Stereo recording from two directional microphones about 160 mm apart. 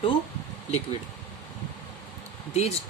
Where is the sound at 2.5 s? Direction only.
40° left (ahead or behind).